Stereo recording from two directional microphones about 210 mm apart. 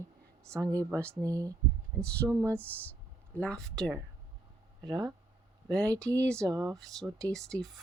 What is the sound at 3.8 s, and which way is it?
Speech, 15° right (ahead or behind).